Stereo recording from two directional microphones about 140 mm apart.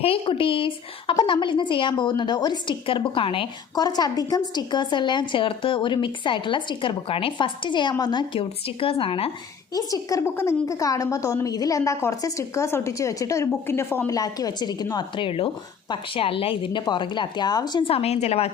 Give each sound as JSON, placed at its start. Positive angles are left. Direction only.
{"t": 0.0, "sound": "a woman's voice", "side_deg": 40}
{"t": 9.7, "sound": "a woman's voice", "side_deg": 25}